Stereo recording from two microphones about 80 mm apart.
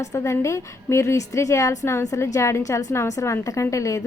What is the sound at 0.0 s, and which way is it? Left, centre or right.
A woman's voice, left.